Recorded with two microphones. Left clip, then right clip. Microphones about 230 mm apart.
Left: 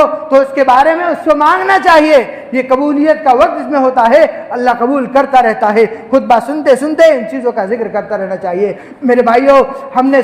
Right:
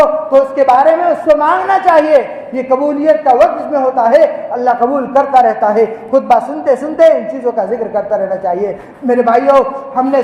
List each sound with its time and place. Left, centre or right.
0.3 s a woman's voice: left